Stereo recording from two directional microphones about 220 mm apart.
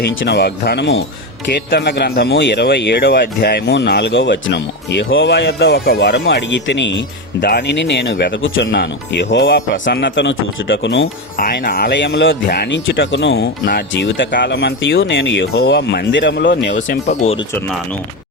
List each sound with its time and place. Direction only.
0.0 s speech: 50° left (ahead or behind)
8.7 s speech: 50° left (ahead or behind)
11.3 s speech: 40° left (ahead or behind)
16.7 s speech: 35° left (ahead or behind)
17.5 s speech: centre (ahead or behind)